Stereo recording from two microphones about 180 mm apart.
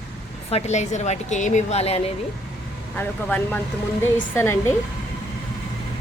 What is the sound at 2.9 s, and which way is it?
Speech, 10° left (ahead or behind).